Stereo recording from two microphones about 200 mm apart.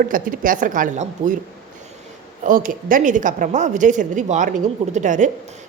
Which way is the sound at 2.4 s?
40° right (ahead or behind).